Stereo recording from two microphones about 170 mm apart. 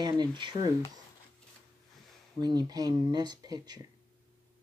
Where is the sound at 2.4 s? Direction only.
25° right (ahead or behind).